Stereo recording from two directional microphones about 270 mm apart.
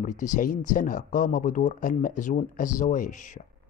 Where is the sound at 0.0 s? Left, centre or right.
Left.